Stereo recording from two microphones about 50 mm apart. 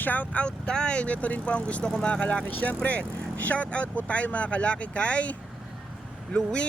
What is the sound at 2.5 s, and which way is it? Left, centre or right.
Speech, left.